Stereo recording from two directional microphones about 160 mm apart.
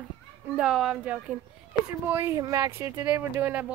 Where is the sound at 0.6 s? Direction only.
5° right (ahead or behind).